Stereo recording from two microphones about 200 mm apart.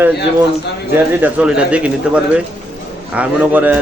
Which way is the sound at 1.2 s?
5° right (ahead or behind).